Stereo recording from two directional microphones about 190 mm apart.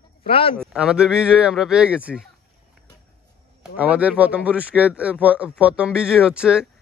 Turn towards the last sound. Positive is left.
turn(degrees=-5)  # may be behind; listen again after turning